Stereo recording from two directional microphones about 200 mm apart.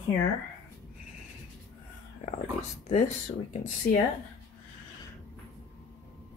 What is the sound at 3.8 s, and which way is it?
Speech, 45° left (ahead or behind).